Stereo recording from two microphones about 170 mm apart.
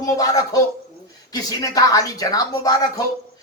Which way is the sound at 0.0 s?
20° left (ahead or behind).